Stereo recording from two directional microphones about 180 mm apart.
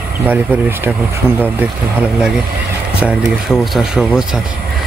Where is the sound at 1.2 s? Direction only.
5° left (ahead or behind).